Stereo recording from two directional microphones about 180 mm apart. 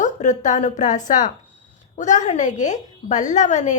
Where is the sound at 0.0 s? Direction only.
45° left (ahead or behind).